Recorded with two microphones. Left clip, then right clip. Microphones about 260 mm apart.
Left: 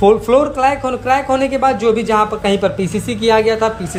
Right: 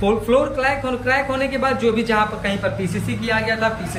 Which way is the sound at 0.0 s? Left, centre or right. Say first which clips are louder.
Left 6 dB; centre.